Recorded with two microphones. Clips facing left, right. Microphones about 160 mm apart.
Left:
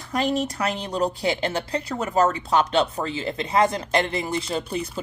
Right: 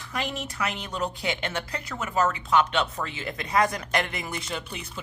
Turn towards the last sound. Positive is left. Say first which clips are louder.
# left 8 dB
turn(degrees=35)  # may be behind; listen again after turning